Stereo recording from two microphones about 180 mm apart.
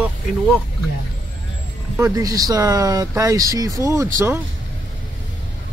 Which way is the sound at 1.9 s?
15° right (ahead or behind).